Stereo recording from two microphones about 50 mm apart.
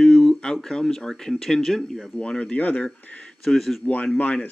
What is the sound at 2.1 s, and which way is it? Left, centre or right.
Speech, centre.